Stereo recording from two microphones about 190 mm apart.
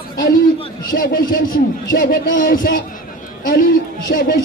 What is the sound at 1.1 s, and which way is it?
A man's voice, 50° left (ahead or behind).